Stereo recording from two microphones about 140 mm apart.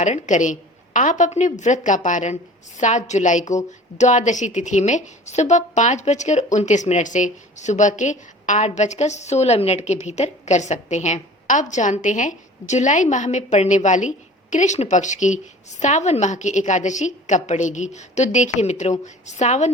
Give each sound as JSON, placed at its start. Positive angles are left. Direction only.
{"t": 0.0, "sound": "a woman's voice", "side_deg": 60}